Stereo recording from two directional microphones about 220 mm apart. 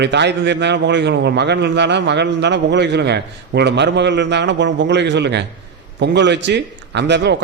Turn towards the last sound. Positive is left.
turn(degrees=-50)  # may be behind; listen again after turning